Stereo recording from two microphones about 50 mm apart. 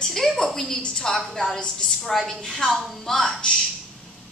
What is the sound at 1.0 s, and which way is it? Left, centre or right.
A woman's voice, centre.